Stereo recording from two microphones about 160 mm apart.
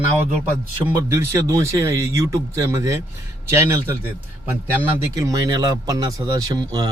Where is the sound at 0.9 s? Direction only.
15° right (ahead or behind).